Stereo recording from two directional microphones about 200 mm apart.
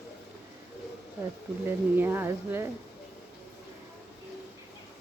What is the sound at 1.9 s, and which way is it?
Speech, 10° right (ahead or behind).